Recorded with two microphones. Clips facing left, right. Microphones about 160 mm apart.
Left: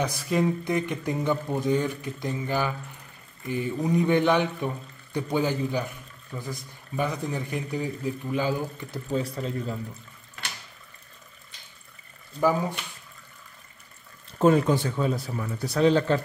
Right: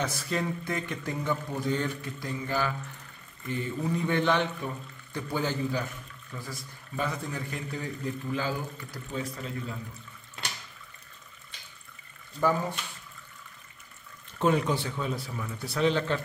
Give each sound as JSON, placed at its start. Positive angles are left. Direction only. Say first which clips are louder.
{"t": 0.0, "sound": "a man's voice", "louder": "left 6 dB", "side_deg": 15}
{"t": 9.1, "sound": "a man's voice", "louder": "left 6 dB", "side_deg": 35}
{"t": 14.4, "sound": "a man's voice", "louder": "left 6 dB", "side_deg": 40}